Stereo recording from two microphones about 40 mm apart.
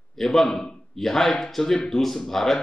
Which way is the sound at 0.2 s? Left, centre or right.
Centre.